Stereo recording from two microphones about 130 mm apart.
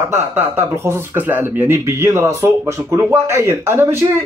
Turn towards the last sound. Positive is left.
turn(degrees=-20)  # may be behind; listen again after turning